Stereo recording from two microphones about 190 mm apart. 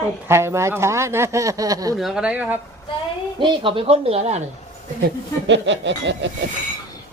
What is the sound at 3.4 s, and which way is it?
Speech, 25° right (ahead or behind).